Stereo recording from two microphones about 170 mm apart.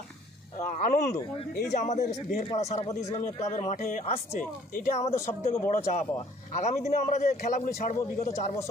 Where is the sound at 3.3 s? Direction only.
40° left (ahead or behind).